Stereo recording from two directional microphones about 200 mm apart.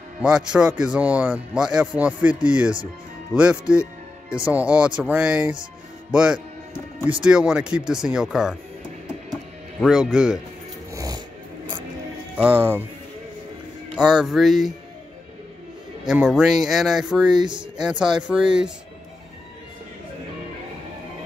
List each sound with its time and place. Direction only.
0.2 s a man's voice: 5° right (ahead or behind)
9.8 s a man's voice: 5° right (ahead or behind)
10.9 s a sound: 15° right (ahead or behind)
12.4 s speech: 10° right (ahead or behind)
13.9 s a man's voice: 5° right (ahead or behind)
16.1 s a man's voice: 5° right (ahead or behind)
17.4 s speech: 20° right (ahead or behind)
17.8 s a man's voice: 5° right (ahead or behind)